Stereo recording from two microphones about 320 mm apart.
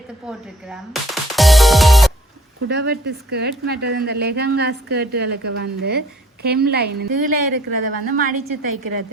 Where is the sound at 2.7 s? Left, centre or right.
Right.